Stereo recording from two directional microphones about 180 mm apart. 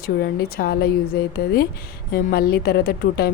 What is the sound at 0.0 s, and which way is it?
Speech, 55° left (ahead or behind).